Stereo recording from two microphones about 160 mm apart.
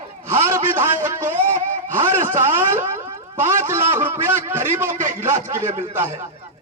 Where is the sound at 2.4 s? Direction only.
15° right (ahead or behind).